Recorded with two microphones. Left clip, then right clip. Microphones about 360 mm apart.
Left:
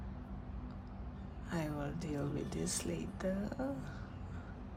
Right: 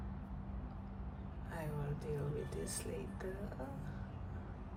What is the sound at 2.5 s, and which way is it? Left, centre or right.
Speech, centre.